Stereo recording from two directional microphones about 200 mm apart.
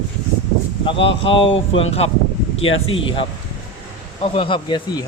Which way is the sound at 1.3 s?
25° left (ahead or behind).